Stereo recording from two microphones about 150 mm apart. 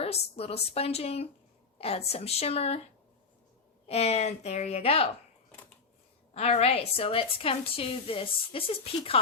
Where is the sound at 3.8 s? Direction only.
45° left (ahead or behind).